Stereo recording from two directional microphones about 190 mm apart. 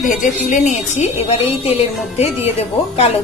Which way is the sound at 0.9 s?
35° left (ahead or behind).